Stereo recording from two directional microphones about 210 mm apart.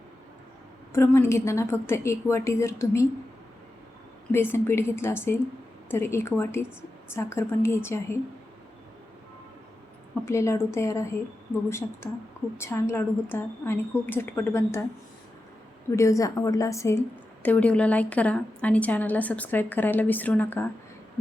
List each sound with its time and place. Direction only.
0.9 s a woman's voice: 10° left (ahead or behind)
4.3 s a woman's voice: 10° left (ahead or behind)
10.2 s a woman's voice: 15° left (ahead or behind)
12.0 s a woman's voice: 10° left (ahead or behind)
15.9 s a woman's voice: 15° left (ahead or behind)